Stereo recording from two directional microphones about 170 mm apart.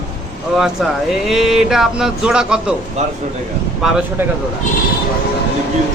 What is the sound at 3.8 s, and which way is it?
Speech, 5° right (ahead or behind).